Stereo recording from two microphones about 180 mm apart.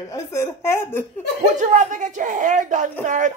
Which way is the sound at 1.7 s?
45° right (ahead or behind).